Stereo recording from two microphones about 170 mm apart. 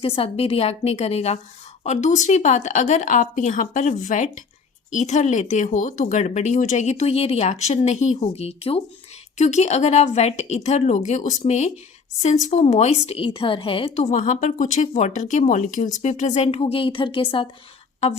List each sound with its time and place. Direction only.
0.0 s a woman's voice: 35° left (ahead or behind)